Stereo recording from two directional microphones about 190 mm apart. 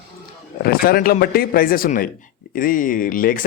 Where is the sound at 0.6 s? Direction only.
55° left (ahead or behind).